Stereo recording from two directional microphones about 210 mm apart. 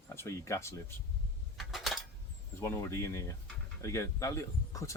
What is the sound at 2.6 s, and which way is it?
Speech, 10° left (ahead or behind).